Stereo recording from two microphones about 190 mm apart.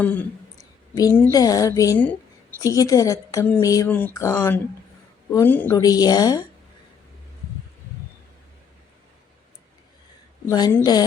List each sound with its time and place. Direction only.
0.0 s a sound: 10° left (ahead or behind)
0.9 s a woman's voice: 15° left (ahead or behind)
10.4 s a woman's voice: 15° left (ahead or behind)